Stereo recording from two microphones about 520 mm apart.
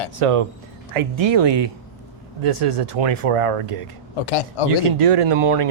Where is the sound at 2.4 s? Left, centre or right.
Right.